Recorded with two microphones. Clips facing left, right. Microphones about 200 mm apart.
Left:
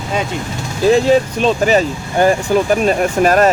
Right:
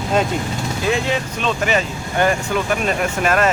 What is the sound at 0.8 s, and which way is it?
Speech, 35° left (ahead or behind).